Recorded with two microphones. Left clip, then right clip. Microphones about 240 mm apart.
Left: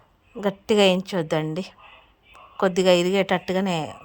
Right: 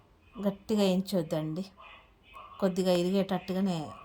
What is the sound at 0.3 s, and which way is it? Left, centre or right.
A woman's voice, centre.